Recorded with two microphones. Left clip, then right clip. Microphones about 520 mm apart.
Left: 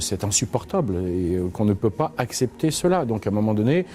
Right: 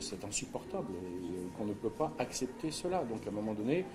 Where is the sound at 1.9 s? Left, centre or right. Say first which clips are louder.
Left 11 dB; left.